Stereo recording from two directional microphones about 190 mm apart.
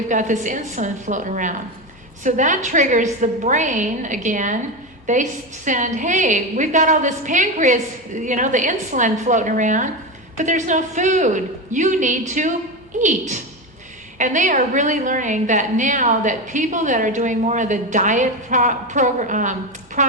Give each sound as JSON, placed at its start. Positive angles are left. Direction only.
{"t": 0.1, "sound": "a woman's voice", "side_deg": -40}